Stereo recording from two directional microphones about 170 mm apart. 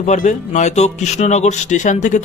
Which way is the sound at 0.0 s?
45° left (ahead or behind).